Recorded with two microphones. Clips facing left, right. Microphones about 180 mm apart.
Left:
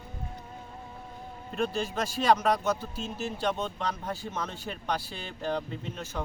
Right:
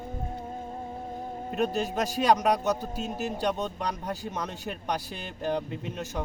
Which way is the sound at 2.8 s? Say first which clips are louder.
Right 3 dB; 45° right (ahead or behind).